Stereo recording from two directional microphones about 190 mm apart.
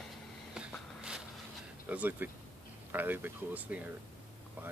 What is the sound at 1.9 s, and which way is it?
Speech, 10° right (ahead or behind).